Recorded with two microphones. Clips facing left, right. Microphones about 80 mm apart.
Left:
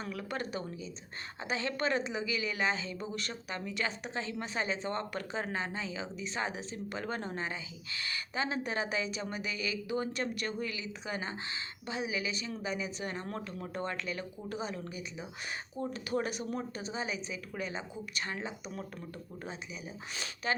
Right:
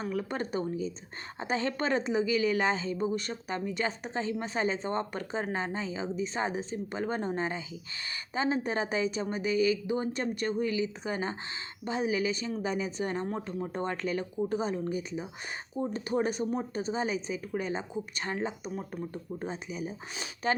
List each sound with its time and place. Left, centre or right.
0.1 s a woman's voice: right
18.7 s speech: centre
19.1 s a woman's voice: right